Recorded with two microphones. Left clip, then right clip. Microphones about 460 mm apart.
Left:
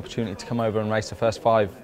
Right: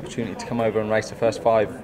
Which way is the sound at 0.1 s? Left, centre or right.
Left.